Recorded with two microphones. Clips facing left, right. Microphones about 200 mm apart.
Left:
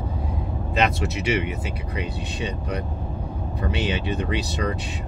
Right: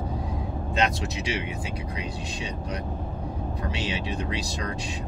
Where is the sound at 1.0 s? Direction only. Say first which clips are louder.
Left 6 dB; 65° left (ahead or behind).